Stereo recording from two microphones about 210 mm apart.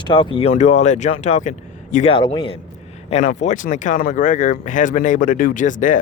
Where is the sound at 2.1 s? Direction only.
25° left (ahead or behind).